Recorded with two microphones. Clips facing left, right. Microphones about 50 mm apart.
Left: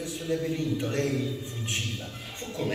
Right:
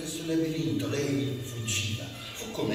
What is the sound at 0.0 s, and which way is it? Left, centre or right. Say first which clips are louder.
A man's voice: right 1 dB; left.